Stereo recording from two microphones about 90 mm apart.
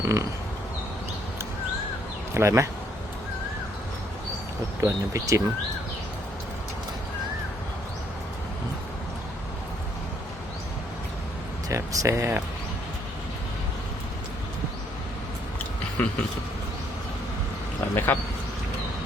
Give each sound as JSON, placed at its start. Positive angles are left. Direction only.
{"t": 0.0, "sound": "speech", "side_deg": -35}
{"t": 2.3, "sound": "speech", "side_deg": -30}
{"t": 4.8, "sound": "speech", "side_deg": -35}
{"t": 11.7, "sound": "speech", "side_deg": -40}
{"t": 16.0, "sound": "speech", "side_deg": 15}
{"t": 17.9, "sound": "speech", "side_deg": 25}